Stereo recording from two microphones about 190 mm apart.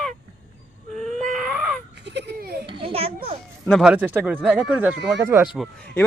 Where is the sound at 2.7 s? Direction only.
25° right (ahead or behind).